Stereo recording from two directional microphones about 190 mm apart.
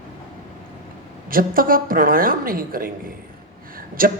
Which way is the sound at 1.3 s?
50° right (ahead or behind).